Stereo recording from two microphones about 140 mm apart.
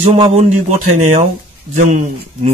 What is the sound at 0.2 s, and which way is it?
Speech, 45° right (ahead or behind).